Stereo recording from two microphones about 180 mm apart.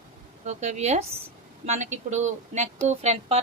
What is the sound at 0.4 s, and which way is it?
A woman's voice, 40° right (ahead or behind).